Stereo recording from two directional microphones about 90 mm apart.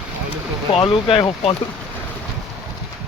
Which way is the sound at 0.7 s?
70° left (ahead or behind).